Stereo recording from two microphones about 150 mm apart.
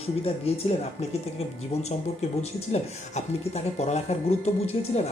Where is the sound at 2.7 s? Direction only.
50° left (ahead or behind).